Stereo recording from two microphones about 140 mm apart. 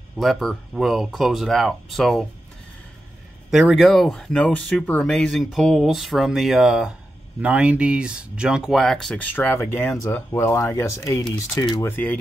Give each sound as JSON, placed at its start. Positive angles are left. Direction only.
{"t": 0.2, "sound": "speech", "side_deg": 0}
{"t": 3.4, "sound": "speech", "side_deg": 0}